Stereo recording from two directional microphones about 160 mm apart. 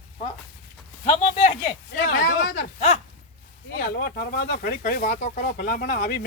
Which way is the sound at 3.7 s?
65° left (ahead or behind).